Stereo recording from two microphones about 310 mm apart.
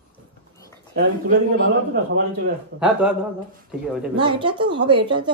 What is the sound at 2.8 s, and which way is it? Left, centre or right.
Speech, centre.